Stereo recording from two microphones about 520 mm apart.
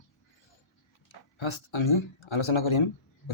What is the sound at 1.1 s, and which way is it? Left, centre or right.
Speech, left.